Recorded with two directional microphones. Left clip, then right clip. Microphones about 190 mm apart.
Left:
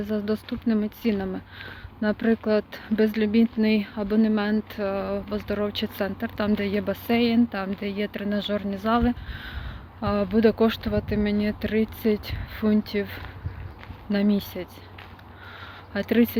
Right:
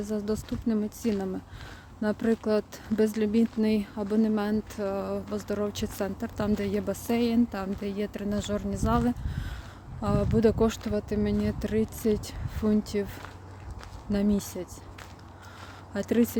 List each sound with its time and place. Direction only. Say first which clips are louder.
0.3 s speech: left 4 dB; 15° right (ahead or behind)
2.0 s speech: left 3 dB; 15° right (ahead or behind)
15.9 s speech: left 4 dB; 15° right (ahead or behind)